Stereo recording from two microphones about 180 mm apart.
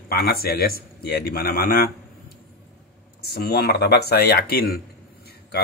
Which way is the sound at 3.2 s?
60° left (ahead or behind).